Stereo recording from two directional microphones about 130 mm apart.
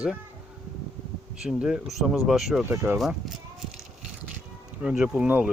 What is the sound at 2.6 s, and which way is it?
Speech, 15° right (ahead or behind).